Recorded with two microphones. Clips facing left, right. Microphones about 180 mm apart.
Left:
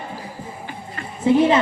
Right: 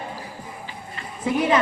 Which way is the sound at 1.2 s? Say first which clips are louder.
Left 7 dB; 25° left (ahead or behind).